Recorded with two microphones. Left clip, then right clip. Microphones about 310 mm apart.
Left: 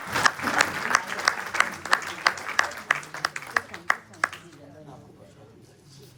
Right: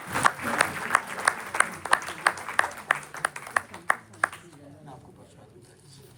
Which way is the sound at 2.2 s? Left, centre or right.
Centre.